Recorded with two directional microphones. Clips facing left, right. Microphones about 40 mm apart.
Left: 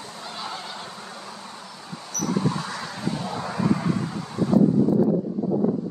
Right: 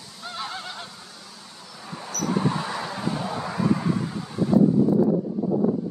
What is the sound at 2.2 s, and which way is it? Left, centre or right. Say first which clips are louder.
Vehicle: right 1 dB; right.